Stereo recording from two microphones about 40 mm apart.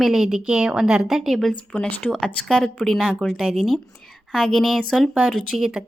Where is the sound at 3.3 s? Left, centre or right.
Centre.